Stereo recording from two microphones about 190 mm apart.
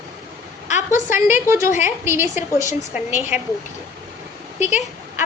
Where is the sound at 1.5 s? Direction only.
15° right (ahead or behind).